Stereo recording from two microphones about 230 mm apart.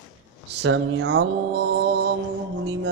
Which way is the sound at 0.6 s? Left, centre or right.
Right.